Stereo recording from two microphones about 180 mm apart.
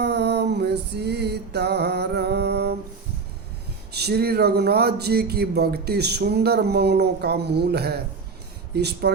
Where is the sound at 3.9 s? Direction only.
65° right (ahead or behind).